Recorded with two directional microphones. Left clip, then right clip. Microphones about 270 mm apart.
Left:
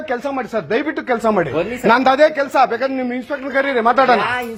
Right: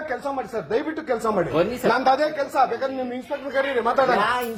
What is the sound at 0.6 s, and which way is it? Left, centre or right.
A man's voice, left.